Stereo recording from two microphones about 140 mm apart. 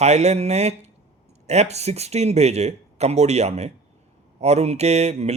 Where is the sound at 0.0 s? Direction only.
50° right (ahead or behind).